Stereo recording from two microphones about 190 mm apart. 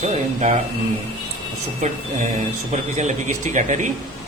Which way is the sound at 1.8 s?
40° right (ahead or behind).